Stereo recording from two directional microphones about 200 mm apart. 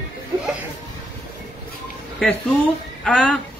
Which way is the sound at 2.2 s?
Centre (ahead or behind).